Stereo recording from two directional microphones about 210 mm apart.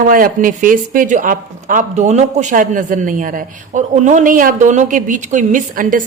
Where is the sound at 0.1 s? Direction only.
40° right (ahead or behind).